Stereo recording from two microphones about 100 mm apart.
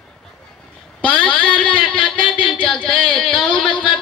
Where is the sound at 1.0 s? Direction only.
10° left (ahead or behind).